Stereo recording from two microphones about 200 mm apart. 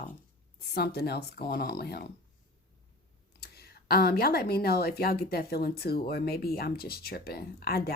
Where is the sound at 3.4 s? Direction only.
50° left (ahead or behind).